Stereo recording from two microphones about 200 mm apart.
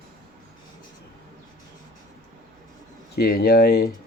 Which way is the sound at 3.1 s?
50° left (ahead or behind).